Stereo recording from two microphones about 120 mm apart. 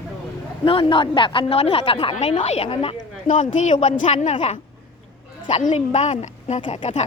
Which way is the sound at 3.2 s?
90° left.